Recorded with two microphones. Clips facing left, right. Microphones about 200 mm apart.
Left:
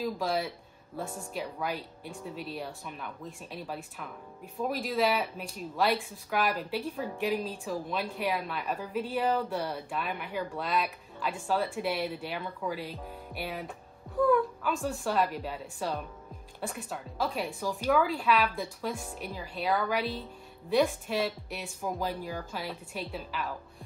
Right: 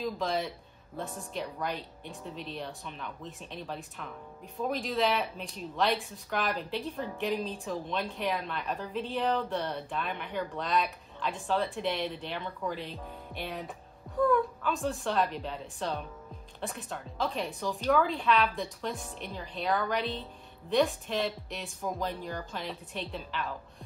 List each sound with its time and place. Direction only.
0.0 s speech: centre (ahead or behind)
14.1 s a sound: centre (ahead or behind)
14.6 s speech: centre (ahead or behind)